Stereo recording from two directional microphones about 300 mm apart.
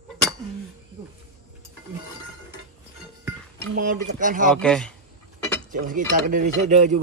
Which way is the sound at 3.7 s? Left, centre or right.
Right.